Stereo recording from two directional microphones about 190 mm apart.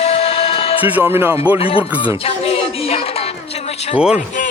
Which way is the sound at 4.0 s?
5° right (ahead or behind).